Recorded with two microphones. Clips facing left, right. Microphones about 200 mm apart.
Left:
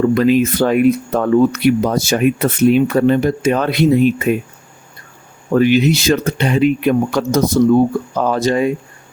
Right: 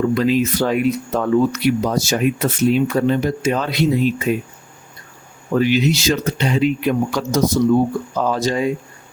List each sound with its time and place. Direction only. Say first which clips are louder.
0.1 s speech: left 4 dB; 55° left (ahead or behind)
5.5 s speech: left 4 dB; 55° left (ahead or behind)